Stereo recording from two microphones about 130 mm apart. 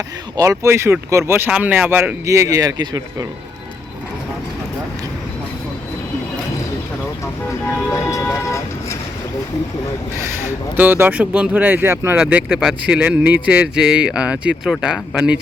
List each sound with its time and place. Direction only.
0.3 s speech: 25° right (ahead or behind)
7.9 s speech: 20° left (ahead or behind)
8.4 s vehicle: 20° left (ahead or behind)
10.4 s a man's voice: 15° right (ahead or behind)